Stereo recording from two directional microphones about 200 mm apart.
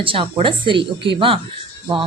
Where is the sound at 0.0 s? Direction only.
25° right (ahead or behind).